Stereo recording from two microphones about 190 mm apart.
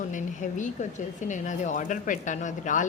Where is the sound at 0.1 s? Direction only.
40° left (ahead or behind).